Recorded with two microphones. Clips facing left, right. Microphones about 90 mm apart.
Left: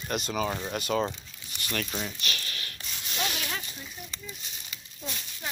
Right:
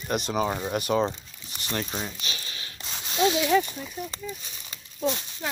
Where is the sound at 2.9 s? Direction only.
35° right (ahead or behind).